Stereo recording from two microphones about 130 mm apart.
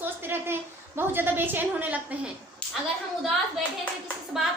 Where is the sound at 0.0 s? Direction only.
15° right (ahead or behind).